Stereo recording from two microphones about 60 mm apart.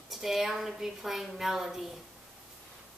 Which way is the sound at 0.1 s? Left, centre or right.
Centre.